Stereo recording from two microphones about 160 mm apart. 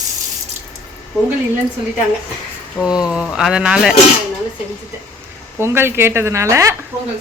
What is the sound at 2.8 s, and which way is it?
Speech, 5° right (ahead or behind).